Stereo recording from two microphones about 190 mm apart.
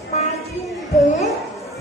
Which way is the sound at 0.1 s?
35° left (ahead or behind).